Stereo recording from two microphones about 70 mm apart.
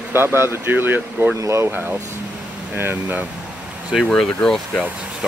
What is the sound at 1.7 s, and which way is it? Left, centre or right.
Speech, right.